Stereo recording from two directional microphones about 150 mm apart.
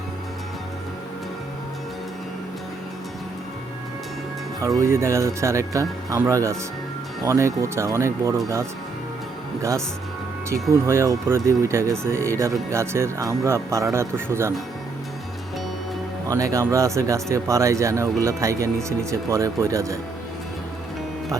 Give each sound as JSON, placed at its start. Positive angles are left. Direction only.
{"t": 4.8, "sound": "speech", "side_deg": -20}
{"t": 10.7, "sound": "speech", "side_deg": -20}
{"t": 16.3, "sound": "speech", "side_deg": -20}